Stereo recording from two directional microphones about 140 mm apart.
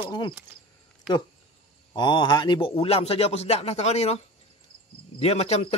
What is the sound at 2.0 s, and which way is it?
Speech, 35° left (ahead or behind).